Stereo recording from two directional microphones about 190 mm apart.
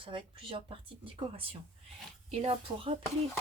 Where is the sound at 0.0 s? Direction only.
25° right (ahead or behind).